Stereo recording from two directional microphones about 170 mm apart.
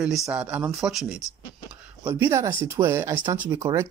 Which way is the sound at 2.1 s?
15° right (ahead or behind).